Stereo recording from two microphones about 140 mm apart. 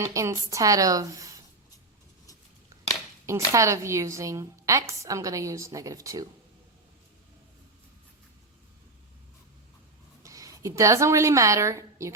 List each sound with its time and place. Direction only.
0.0 s a woman's voice: 20° right (ahead or behind)
3.2 s a woman's voice: 20° right (ahead or behind)
10.2 s a woman's voice: 25° right (ahead or behind)